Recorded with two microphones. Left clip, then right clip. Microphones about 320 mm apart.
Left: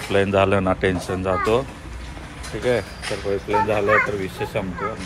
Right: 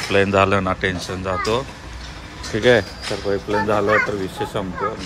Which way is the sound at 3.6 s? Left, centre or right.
Centre.